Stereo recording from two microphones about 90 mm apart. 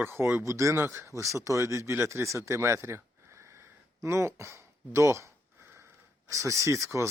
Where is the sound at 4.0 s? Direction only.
30° right (ahead or behind).